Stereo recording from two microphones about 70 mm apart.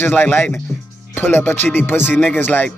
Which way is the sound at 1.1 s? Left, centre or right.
Left.